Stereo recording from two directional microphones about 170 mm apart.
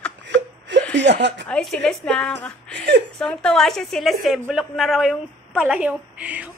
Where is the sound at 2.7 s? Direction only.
90° right.